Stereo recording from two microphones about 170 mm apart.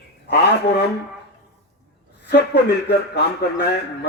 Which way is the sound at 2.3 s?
70° left (ahead or behind).